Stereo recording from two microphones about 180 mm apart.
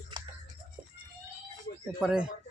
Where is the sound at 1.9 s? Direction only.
5° right (ahead or behind).